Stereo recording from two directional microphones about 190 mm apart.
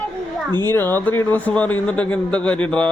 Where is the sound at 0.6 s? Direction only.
10° left (ahead or behind).